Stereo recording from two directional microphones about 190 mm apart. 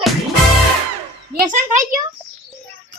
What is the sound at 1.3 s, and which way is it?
Speech, 40° right (ahead or behind).